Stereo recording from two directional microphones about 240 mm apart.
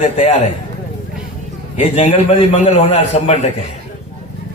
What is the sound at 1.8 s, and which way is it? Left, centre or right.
A man's voice, left.